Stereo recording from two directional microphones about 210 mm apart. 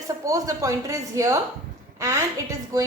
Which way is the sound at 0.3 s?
15° right (ahead or behind).